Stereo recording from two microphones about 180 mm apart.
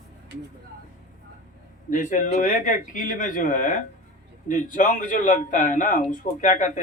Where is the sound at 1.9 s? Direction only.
45° left (ahead or behind).